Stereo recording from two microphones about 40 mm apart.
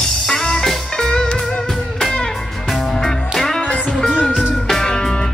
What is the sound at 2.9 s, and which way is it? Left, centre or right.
Music, centre.